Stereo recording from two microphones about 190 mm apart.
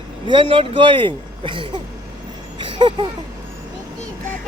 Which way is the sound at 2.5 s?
25° right (ahead or behind).